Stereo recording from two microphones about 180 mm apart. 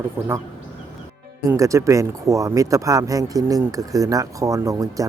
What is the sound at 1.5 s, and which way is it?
Speech, 15° right (ahead or behind).